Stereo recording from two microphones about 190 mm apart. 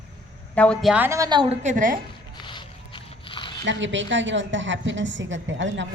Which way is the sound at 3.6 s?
75° right (ahead or behind).